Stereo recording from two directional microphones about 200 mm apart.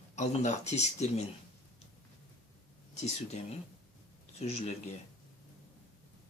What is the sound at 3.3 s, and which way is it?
Speech, 35° left (ahead or behind).